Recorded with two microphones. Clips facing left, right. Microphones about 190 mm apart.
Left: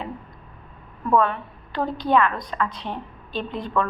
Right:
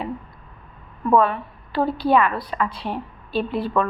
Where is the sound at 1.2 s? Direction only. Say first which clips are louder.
Right 2 dB; 5° right (ahead or behind).